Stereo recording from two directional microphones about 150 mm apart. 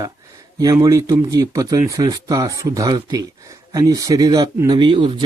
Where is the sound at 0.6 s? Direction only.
25° right (ahead or behind).